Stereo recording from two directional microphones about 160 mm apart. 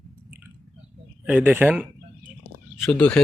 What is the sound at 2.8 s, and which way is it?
Speech, 5° left (ahead or behind).